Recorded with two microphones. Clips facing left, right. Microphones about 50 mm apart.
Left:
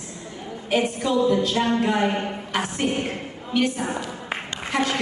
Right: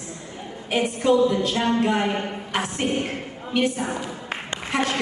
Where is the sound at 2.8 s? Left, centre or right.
Right.